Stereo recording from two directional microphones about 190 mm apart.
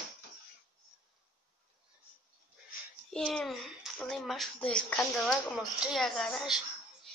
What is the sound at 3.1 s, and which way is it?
A child's voice, centre (ahead or behind).